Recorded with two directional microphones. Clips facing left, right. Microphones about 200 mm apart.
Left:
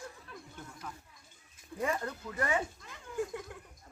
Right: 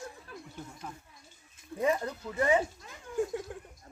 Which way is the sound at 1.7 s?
20° right (ahead or behind).